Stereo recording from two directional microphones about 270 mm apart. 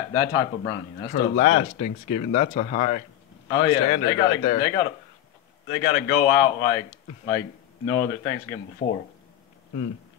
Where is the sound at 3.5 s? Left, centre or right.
Centre.